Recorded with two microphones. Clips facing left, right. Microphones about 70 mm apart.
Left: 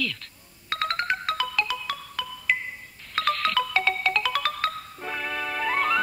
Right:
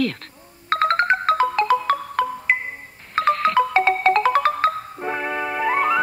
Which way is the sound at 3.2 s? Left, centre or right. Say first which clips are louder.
Right 7 dB; right.